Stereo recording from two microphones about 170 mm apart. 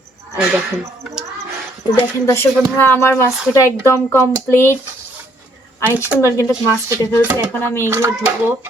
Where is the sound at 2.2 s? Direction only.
15° left (ahead or behind).